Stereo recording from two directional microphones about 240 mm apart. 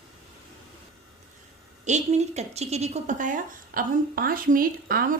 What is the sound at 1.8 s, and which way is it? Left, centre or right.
A woman's voice, right.